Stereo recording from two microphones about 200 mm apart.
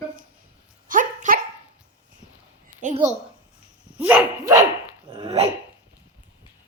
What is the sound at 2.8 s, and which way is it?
Dog, 40° right (ahead or behind).